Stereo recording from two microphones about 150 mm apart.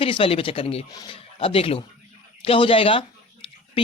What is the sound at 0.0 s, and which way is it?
Speech, 40° left (ahead or behind).